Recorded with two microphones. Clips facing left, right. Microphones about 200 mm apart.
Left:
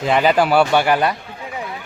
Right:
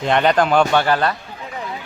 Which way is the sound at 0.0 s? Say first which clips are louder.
Left 1 dB; 5° left (ahead or behind).